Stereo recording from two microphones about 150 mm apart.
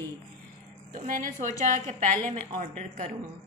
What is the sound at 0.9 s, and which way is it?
A woman's voice, 60° right (ahead or behind).